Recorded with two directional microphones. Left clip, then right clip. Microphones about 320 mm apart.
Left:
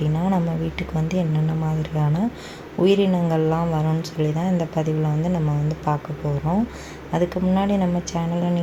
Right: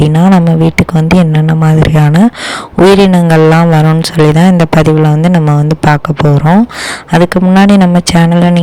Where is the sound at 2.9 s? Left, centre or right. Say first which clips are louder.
Right 13 dB; right.